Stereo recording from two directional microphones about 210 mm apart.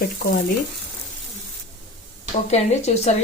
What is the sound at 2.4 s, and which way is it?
Speech, 30° left (ahead or behind).